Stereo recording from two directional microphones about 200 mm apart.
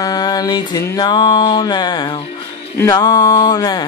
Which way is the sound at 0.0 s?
20° left (ahead or behind).